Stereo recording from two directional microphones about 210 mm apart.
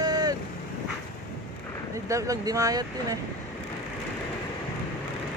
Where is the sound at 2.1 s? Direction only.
15° right (ahead or behind).